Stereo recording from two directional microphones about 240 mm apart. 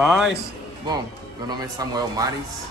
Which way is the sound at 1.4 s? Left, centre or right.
Centre.